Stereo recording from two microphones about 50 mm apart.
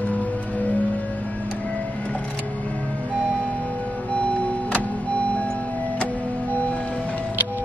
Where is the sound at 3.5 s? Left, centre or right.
Left.